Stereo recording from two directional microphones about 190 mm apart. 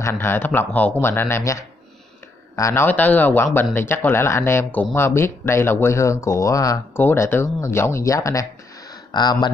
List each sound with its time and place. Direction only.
0.0 s speech: 15° left (ahead or behind)